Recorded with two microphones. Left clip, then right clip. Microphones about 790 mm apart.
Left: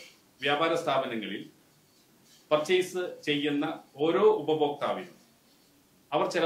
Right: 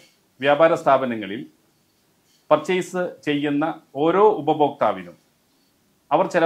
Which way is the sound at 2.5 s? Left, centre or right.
Right.